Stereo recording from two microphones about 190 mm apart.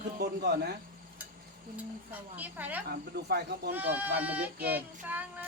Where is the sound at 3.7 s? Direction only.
10° right (ahead or behind).